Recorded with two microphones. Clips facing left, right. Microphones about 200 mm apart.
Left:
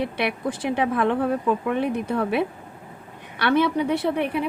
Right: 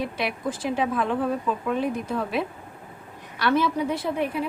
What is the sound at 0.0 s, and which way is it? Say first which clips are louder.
A woman's voice: left 3 dB; 65° left (ahead or behind).